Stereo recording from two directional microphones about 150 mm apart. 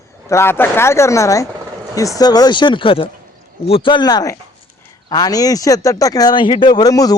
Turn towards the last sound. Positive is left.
turn(degrees=25)  # may be behind; listen again after turning